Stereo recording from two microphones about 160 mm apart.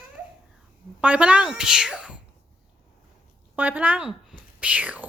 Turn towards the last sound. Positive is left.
turn(degrees=-10)  # may be behind; listen again after turning